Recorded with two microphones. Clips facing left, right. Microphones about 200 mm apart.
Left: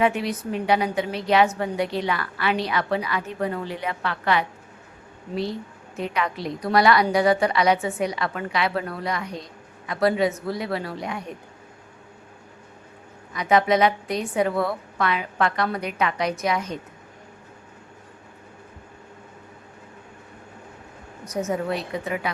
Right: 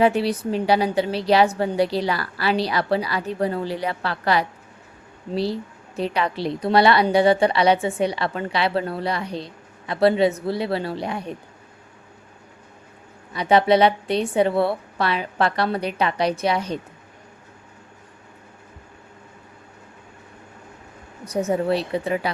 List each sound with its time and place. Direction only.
0.0 s a woman's voice: 35° right (ahead or behind)
13.3 s a woman's voice: 30° right (ahead or behind)
21.2 s a woman's voice: 30° right (ahead or behind)